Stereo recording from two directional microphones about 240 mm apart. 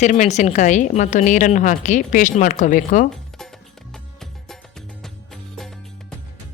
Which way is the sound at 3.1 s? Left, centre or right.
Centre.